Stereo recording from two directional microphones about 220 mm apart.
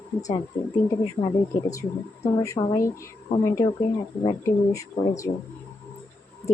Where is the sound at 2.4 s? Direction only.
20° left (ahead or behind).